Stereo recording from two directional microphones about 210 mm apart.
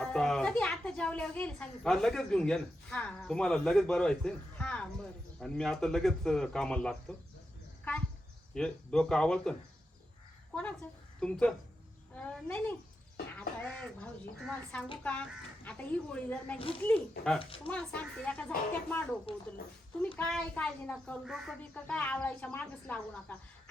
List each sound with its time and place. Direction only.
0.0 s speech: centre (ahead or behind)
8.5 s a child's voice: 5° left (ahead or behind)
17.4 s speech: 25° left (ahead or behind)
17.7 s speech: 5° left (ahead or behind)
19.3 s speech: 25° left (ahead or behind)
20.1 s speech: 5° left (ahead or behind)